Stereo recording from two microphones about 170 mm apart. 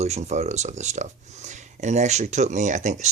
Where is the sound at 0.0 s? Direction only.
40° right (ahead or behind).